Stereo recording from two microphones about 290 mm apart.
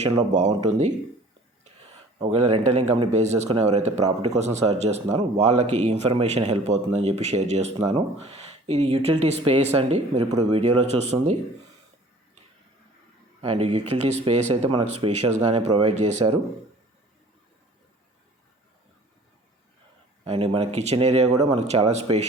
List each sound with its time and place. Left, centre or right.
0.0 s speech: right
2.1 s speech: right
13.4 s speech: right
20.2 s speech: centre